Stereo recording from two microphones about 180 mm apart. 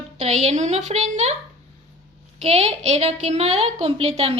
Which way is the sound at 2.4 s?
35° right (ahead or behind).